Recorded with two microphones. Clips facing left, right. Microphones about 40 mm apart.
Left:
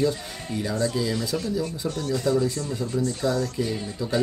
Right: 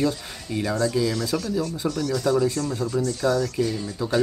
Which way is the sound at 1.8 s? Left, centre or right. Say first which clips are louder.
Right 2 dB; right.